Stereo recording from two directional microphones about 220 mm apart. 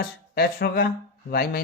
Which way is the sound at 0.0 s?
45° left (ahead or behind).